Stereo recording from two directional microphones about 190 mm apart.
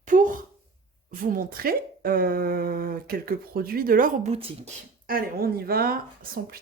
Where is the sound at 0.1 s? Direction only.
45° right (ahead or behind).